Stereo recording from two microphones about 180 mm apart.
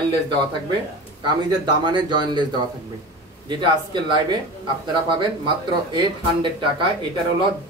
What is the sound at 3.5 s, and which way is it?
Speech, 25° right (ahead or behind).